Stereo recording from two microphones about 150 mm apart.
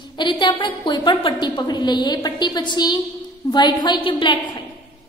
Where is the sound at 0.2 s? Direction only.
30° left (ahead or behind).